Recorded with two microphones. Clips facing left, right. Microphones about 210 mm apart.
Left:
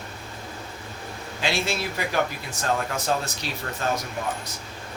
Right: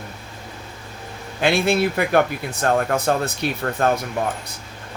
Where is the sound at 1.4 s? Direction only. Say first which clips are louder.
Right 9 dB; 60° right (ahead or behind).